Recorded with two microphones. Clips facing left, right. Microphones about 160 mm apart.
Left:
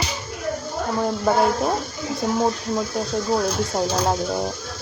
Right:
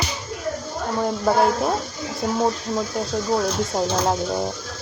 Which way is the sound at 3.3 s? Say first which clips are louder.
Even; centre (ahead or behind).